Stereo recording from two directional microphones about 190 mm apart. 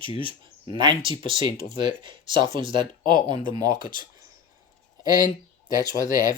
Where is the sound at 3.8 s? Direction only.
45° left (ahead or behind).